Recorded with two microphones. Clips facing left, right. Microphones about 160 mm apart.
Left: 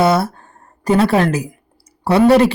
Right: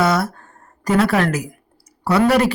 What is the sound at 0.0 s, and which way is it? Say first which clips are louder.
Speech: left 3 dB; 30° left (ahead or behind).